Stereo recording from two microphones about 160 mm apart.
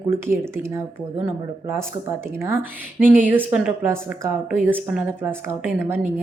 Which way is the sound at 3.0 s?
10° right (ahead or behind).